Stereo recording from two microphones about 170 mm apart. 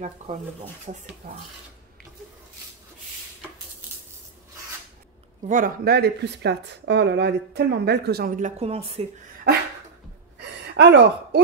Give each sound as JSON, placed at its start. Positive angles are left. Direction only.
{"t": 0.9, "sound": "speech", "side_deg": -45}
{"t": 5.5, "sound": "speech", "side_deg": -60}
{"t": 8.4, "sound": "speech", "side_deg": -40}
{"t": 10.4, "sound": "a sound", "side_deg": -85}